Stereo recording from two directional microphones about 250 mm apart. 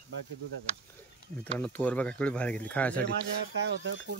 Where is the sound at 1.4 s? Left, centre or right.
Centre.